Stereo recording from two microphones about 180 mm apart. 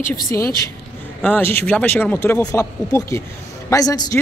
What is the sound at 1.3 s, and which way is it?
Speech, 10° left (ahead or behind).